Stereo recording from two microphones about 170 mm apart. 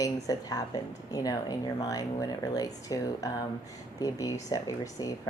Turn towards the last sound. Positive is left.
turn(degrees=20)  # may be behind; listen again after turning